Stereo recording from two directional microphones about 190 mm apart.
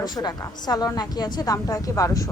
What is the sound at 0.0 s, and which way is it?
A woman's voice, 20° left (ahead or behind).